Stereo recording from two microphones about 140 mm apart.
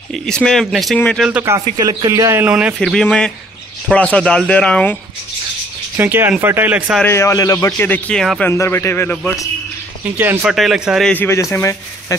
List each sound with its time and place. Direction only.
0.1 s speech: 5° left (ahead or behind)
0.9 s speech: 10° left (ahead or behind)
1.4 s a man's voice: 25° right (ahead or behind)
2.4 s speech: 10° right (ahead or behind)
2.8 s speech: 5° left (ahead or behind)
5.9 s speech: 15° right (ahead or behind)
7.1 s speech: 20° left (ahead or behind)
8.2 s speech: centre (ahead or behind)
8.5 s speech: 15° left (ahead or behind)
10.1 s speech: 15° right (ahead or behind)
10.5 s speech: centre (ahead or behind)
11.1 s speech: 15° left (ahead or behind)